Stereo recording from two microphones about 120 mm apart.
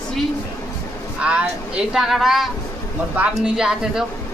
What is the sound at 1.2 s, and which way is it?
A woman's voice, 10° right (ahead or behind).